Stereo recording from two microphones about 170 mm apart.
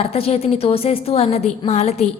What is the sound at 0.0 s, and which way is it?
A woman's voice, 35° left (ahead or behind).